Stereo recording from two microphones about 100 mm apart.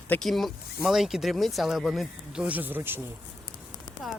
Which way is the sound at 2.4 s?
15° right (ahead or behind).